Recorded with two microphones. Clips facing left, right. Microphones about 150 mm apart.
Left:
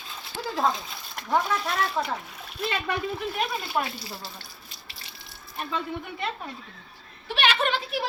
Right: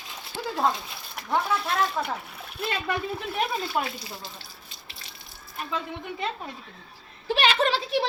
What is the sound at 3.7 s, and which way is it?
Speech, 15° right (ahead or behind).